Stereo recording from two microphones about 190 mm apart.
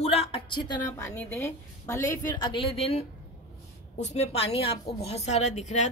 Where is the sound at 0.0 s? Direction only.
30° left (ahead or behind).